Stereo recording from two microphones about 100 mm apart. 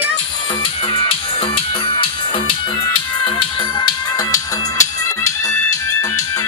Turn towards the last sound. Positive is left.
turn(degrees=35)  # may be behind; listen again after turning